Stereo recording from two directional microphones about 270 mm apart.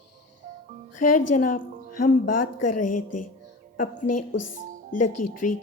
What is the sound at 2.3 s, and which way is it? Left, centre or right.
Speech, left.